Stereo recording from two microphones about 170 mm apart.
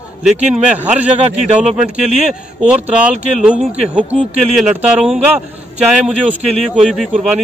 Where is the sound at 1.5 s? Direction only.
40° right (ahead or behind).